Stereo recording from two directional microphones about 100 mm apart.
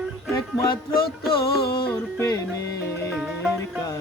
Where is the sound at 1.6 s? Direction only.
50° left (ahead or behind).